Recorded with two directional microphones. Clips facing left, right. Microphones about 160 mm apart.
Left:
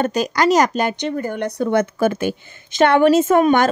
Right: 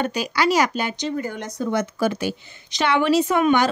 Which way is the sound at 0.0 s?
40° left (ahead or behind).